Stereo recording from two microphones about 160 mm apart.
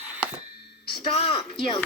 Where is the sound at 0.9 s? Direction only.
35° left (ahead or behind).